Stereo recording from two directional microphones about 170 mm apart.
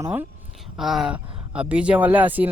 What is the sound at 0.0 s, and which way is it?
Speech, 10° right (ahead or behind).